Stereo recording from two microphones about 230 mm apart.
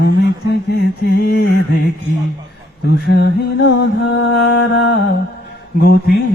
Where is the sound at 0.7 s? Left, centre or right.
Left.